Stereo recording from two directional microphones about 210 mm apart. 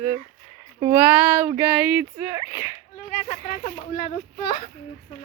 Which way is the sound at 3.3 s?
30° left (ahead or behind).